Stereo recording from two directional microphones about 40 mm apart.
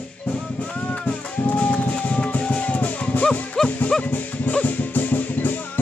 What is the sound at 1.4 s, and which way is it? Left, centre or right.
Music, left.